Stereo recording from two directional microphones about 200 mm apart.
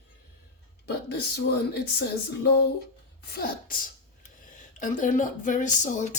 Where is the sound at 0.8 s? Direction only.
55° left (ahead or behind).